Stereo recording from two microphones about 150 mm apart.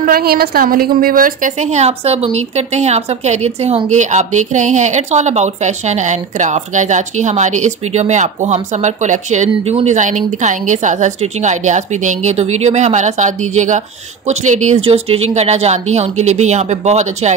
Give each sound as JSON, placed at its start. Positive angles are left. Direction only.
{"t": 0.0, "sound": "a woman's voice", "side_deg": -85}